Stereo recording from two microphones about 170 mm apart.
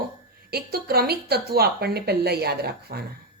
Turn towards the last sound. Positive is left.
turn(degrees=-70)  # may be behind; listen again after turning